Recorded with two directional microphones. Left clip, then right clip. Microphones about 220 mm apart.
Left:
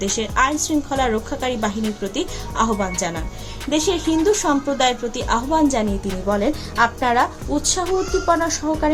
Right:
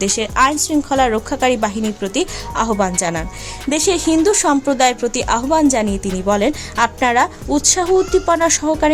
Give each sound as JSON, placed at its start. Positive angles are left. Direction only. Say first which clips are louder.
{"t": 0.0, "sound": "speech", "louder": "right 4 dB", "side_deg": -45}